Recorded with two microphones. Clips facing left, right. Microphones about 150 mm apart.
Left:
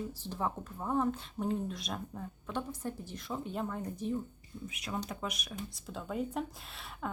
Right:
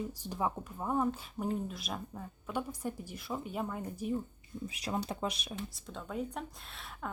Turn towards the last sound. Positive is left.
turn(degrees=0)  # may be behind; listen again after turning